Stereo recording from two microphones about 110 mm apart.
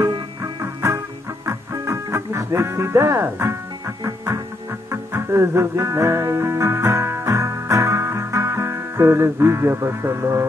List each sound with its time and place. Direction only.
0.4 s music: 25° right (ahead or behind)